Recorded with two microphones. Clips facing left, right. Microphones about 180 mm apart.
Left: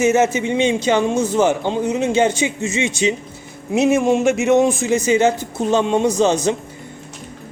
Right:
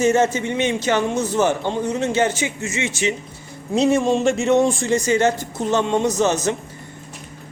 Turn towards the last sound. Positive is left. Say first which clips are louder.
# left 3 dB
turn(degrees=15)  # may be behind; listen again after turning